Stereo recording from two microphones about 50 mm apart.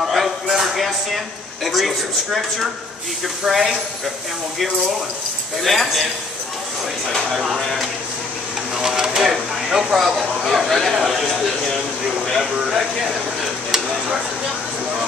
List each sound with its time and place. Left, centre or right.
0.0 s a man's voice: centre
5.6 s speech: centre
7.2 s speech: centre
8.7 s a sound: centre
9.9 s speech: centre